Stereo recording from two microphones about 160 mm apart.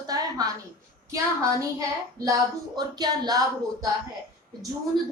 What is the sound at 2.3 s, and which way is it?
A woman's voice, 25° right (ahead or behind).